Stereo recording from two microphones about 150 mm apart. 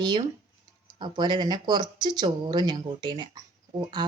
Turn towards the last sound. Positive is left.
turn(degrees=-30)  # may be behind; listen again after turning